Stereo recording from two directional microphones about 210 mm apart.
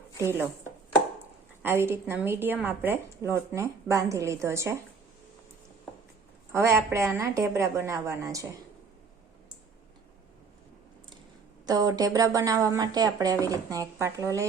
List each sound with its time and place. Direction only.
0.2 s a woman's voice: 10° right (ahead or behind)
1.6 s a woman's voice: 10° right (ahead or behind)
6.5 s a woman's voice: 15° right (ahead or behind)
11.6 s a woman's voice: 20° right (ahead or behind)